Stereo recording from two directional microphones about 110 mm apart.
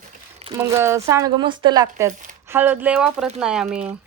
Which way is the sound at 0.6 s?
25° right (ahead or behind).